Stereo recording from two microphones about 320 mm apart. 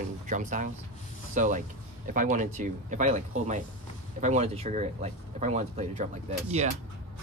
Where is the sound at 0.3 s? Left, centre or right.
Right.